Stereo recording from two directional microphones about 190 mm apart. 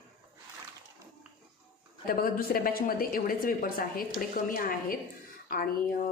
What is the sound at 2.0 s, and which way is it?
Speech, 50° left (ahead or behind).